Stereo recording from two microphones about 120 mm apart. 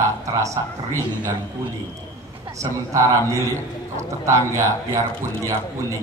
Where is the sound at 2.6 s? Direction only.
25° right (ahead or behind).